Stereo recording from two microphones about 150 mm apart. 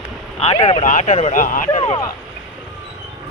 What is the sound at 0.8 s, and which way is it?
Speech, 55° left (ahead or behind).